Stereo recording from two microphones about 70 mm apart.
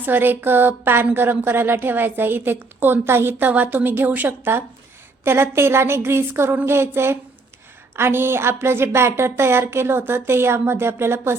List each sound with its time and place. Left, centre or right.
0.0 s a woman's voice: right